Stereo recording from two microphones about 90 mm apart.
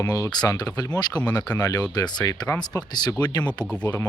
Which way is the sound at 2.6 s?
50° left (ahead or behind).